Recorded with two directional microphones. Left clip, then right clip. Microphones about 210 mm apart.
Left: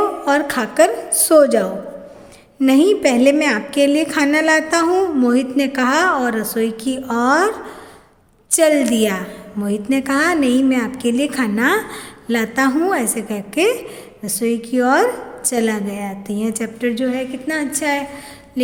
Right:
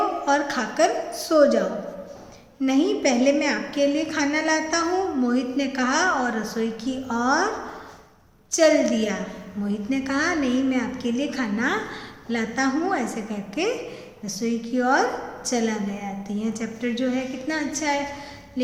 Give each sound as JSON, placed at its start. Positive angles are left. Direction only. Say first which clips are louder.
{"t": 0.3, "sound": "a woman's voice", "louder": "left 5 dB", "side_deg": 45}
{"t": 8.5, "sound": "a woman's voice", "louder": "left 4 dB", "side_deg": 55}